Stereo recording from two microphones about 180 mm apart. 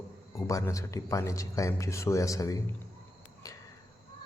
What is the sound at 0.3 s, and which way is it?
Speech, 15° left (ahead or behind).